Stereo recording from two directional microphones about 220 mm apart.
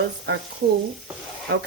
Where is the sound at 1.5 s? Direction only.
50° right (ahead or behind).